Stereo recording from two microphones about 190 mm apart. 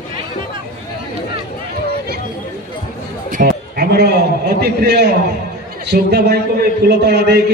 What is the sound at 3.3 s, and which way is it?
A man's voice, 50° right (ahead or behind).